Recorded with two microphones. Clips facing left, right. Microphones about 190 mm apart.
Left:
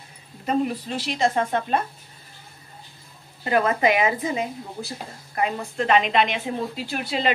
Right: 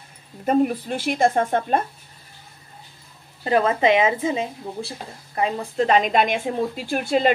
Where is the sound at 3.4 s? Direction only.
30° right (ahead or behind); by 7.3 s 50° right (ahead or behind).